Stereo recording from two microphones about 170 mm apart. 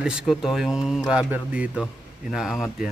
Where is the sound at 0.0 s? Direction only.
5° right (ahead or behind).